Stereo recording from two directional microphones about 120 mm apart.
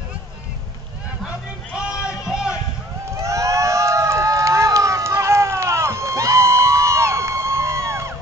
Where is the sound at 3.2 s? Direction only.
25° right (ahead or behind).